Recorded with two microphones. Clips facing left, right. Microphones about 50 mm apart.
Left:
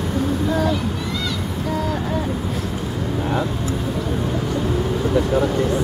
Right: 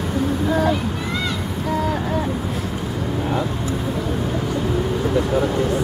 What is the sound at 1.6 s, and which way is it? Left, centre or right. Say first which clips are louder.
Vehicle: right 2 dB; centre.